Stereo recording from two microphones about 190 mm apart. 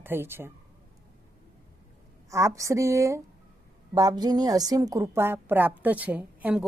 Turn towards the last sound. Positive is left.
turn(degrees=-5)  # may be behind; listen again after turning